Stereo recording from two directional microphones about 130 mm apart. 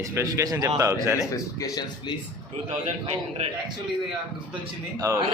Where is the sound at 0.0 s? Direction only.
20° right (ahead or behind).